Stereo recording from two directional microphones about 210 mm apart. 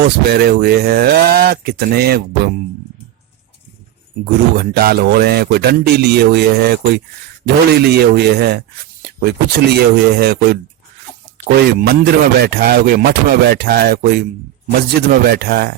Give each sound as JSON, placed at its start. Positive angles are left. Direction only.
{"t": 0.0, "sound": "a man's voice", "side_deg": -50}
{"t": 4.5, "sound": "a man's voice", "side_deg": -45}